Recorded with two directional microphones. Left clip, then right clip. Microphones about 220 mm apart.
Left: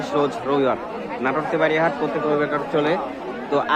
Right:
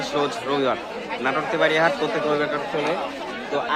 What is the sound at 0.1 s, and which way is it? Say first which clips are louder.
Speech: left 4 dB; centre (ahead or behind).